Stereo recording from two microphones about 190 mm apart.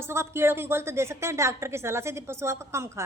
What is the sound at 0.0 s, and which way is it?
Speech, 15° right (ahead or behind).